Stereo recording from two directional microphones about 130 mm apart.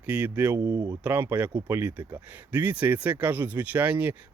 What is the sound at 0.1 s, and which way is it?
Speech, 15° right (ahead or behind).